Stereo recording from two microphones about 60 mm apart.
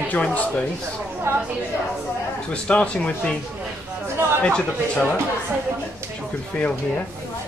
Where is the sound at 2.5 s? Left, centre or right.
Centre.